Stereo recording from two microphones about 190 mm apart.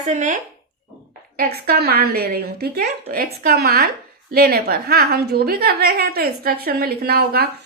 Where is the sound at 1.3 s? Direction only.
55° right (ahead or behind).